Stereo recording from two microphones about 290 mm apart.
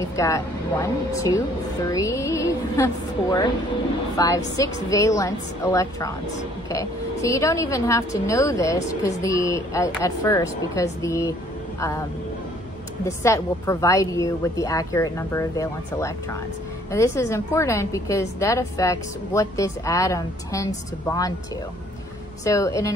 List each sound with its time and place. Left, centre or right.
0.0 s a woman's voice: centre
4.8 s a woman's voice: centre
22.4 s a woman's voice: centre